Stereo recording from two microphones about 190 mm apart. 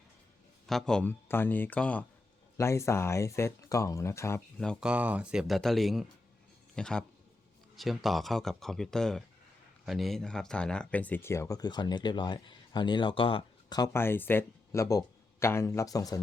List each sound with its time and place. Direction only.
0.7 s speech: centre (ahead or behind)
4.6 s speech: centre (ahead or behind); by 16.2 s 20° left (ahead or behind)